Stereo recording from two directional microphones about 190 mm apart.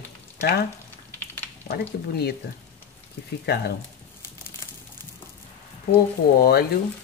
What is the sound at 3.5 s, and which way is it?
Speech, 60° left (ahead or behind).